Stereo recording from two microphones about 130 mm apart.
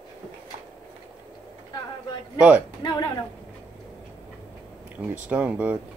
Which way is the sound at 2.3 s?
10° right (ahead or behind).